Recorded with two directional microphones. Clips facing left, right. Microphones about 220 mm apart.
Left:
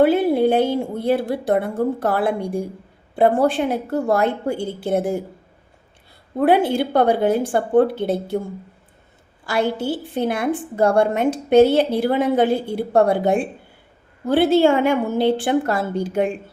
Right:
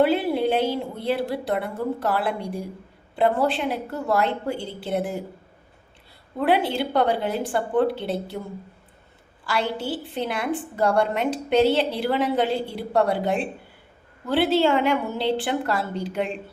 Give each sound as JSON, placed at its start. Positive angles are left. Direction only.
{"t": 0.0, "sound": "a woman's voice", "side_deg": 50}
{"t": 6.4, "sound": "a woman's voice", "side_deg": 50}
{"t": 9.5, "sound": "a woman's voice", "side_deg": 45}